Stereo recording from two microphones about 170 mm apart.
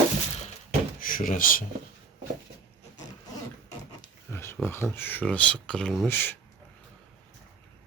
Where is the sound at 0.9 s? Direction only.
55° left (ahead or behind).